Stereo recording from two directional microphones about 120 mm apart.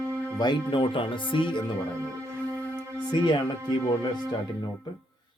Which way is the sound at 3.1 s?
40° left (ahead or behind).